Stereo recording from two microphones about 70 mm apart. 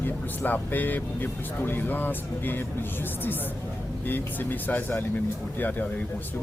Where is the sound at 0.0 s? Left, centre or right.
Left.